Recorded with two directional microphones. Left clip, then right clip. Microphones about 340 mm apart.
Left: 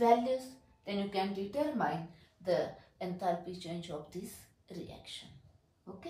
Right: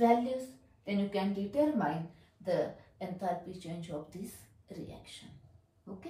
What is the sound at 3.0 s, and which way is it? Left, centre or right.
Speech, centre.